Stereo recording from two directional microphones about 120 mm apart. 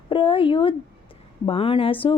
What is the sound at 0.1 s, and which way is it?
Speech, 50° left (ahead or behind).